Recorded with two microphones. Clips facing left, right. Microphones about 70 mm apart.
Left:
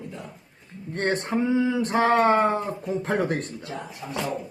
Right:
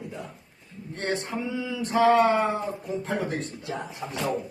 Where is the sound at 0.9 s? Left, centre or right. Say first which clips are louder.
Left 4 dB; left.